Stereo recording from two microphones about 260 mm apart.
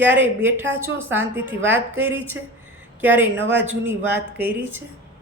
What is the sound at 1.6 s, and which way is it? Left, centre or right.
Speech, right.